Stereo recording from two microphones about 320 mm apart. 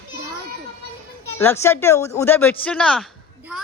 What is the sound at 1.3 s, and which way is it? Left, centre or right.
A woman's voice, centre.